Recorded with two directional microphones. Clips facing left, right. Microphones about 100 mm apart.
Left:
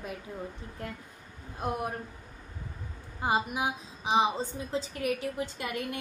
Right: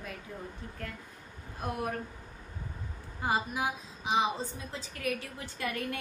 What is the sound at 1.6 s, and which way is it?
Speech, 20° left (ahead or behind).